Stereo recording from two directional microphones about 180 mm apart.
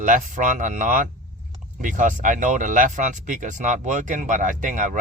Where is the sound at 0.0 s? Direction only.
45° right (ahead or behind).